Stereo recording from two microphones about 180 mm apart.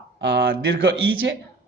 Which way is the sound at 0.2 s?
90° right.